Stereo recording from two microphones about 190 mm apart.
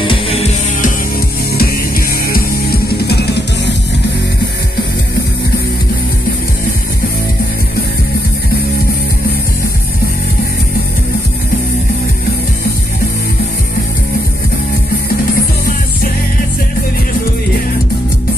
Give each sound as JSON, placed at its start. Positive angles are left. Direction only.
{"t": 0.0, "sound": "music", "side_deg": 30}
{"t": 1.6, "sound": "music", "side_deg": 50}